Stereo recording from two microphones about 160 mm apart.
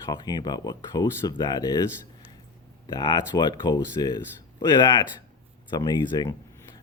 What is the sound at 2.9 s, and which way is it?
Speech, 25° left (ahead or behind).